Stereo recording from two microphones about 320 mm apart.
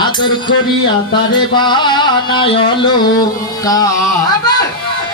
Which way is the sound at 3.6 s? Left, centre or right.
Centre.